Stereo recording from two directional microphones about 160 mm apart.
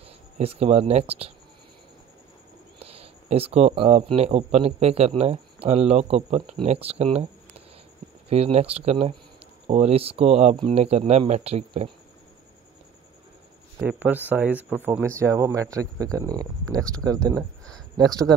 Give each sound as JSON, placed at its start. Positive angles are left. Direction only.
{"t": 0.4, "sound": "speech", "side_deg": -40}
{"t": 2.8, "sound": "speech", "side_deg": -40}
{"t": 13.7, "sound": "speech", "side_deg": -10}
{"t": 17.4, "sound": "a sound", "side_deg": 5}
{"t": 17.9, "sound": "speech", "side_deg": -25}